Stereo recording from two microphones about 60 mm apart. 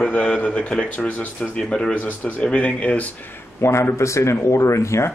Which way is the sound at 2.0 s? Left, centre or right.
Left.